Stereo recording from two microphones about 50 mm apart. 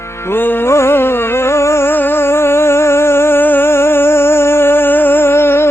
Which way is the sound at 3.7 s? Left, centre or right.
Left.